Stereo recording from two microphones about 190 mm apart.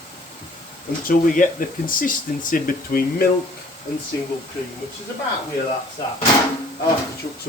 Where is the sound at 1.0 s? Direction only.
45° left (ahead or behind).